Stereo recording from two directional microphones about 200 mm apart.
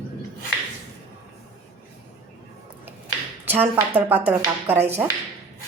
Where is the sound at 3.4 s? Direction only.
10° right (ahead or behind).